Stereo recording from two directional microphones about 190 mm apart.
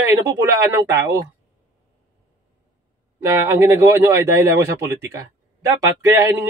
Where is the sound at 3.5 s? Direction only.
15° right (ahead or behind).